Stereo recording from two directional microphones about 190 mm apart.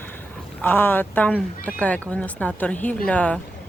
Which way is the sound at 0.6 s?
10° left (ahead or behind).